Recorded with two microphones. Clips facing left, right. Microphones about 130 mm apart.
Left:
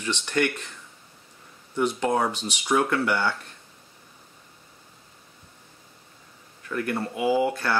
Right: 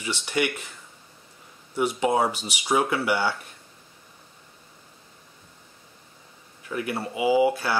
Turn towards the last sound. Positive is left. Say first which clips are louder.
# right 2 dB
turn(degrees=-5)  # may be behind; listen again after turning